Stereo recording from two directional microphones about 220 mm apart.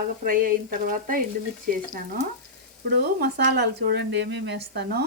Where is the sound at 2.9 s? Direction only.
45° right (ahead or behind).